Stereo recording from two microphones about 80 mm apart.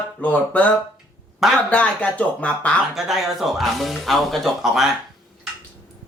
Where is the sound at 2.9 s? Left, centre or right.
Centre.